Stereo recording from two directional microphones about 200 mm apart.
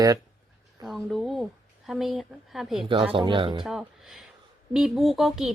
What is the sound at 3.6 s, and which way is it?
Speech, centre (ahead or behind).